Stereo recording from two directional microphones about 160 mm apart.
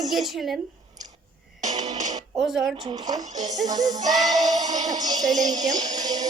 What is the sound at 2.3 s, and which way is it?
Speech, 5° right (ahead or behind).